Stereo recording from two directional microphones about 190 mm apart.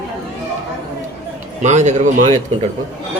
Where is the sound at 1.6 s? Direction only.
40° right (ahead or behind).